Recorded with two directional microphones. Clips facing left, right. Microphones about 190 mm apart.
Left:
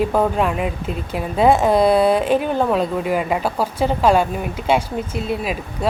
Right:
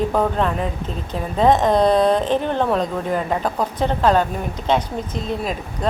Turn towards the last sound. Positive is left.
turn(degrees=10)  # may be behind; listen again after turning